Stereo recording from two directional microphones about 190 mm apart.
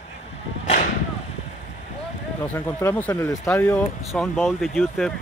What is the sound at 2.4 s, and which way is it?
Speech, 10° left (ahead or behind).